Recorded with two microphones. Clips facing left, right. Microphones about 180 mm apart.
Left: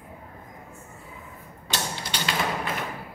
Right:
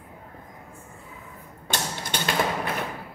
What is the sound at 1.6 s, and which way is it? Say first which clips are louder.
Mechanisms: right 1 dB; 50° right (ahead or behind).